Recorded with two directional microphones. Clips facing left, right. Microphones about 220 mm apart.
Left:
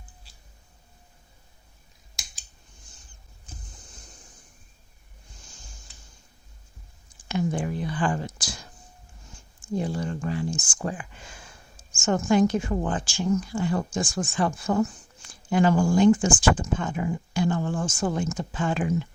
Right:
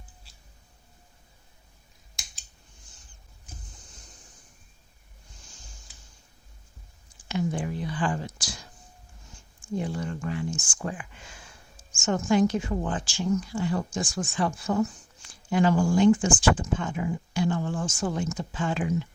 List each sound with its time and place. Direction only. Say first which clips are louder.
7.3 s speech: left 2 dB; 50° left (ahead or behind)
9.7 s speech: left 2 dB; 35° left (ahead or behind)
11.9 s speech: left 2 dB; 50° left (ahead or behind)